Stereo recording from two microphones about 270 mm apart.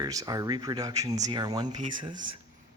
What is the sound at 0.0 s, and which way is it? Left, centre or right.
Speech, centre.